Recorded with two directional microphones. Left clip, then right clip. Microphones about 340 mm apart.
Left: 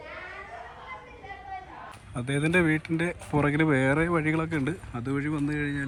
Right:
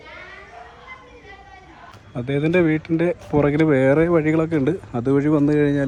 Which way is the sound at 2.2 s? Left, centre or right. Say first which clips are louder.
Right 6 dB; centre.